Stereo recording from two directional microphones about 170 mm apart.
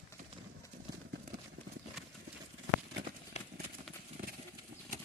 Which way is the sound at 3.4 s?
40° left (ahead or behind).